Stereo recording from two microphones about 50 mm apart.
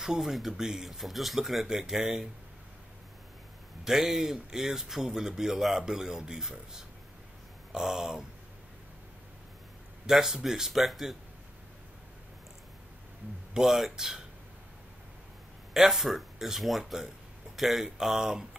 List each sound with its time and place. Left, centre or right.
0.0 s speech: centre
3.8 s speech: centre
10.0 s speech: centre
13.5 s speech: centre
15.7 s speech: centre